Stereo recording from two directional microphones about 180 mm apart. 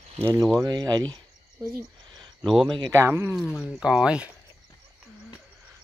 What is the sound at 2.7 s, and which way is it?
Speech, 25° right (ahead or behind).